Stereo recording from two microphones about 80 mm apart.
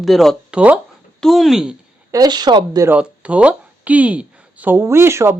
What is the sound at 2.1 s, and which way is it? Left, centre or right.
Speech, right.